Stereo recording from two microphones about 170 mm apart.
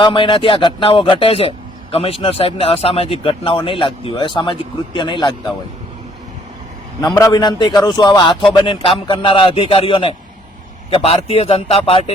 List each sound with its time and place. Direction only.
0.0 s a man's voice: 30° left (ahead or behind)
7.1 s a man's voice: 20° left (ahead or behind)